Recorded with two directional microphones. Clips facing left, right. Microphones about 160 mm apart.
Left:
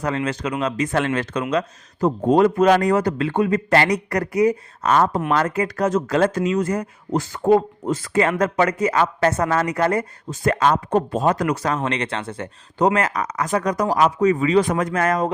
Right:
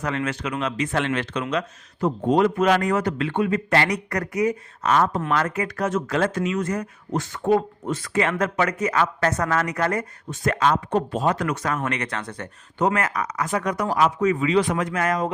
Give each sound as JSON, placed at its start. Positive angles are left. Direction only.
{"t": 0.0, "sound": "speech", "side_deg": 30}
{"t": 13.2, "sound": "speech", "side_deg": 45}